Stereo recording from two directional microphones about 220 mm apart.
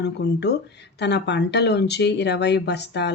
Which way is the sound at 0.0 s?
50° left (ahead or behind).